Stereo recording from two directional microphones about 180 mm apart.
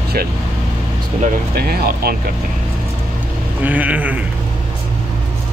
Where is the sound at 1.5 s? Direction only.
60° right (ahead or behind).